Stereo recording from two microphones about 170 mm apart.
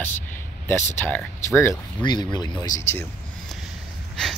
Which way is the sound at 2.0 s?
25° left (ahead or behind).